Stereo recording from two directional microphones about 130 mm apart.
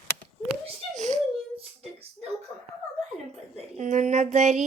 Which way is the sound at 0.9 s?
65° right (ahead or behind).